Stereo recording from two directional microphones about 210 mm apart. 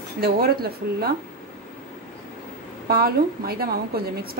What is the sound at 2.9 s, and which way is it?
A woman's voice, 45° right (ahead or behind).